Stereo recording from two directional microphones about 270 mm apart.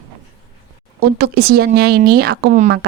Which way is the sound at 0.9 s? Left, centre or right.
Right.